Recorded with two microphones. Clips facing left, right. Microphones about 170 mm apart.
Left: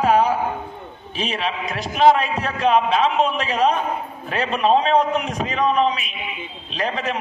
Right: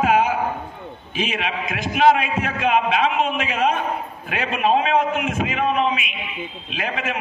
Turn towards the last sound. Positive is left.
turn(degrees=35)  # may be behind; listen again after turning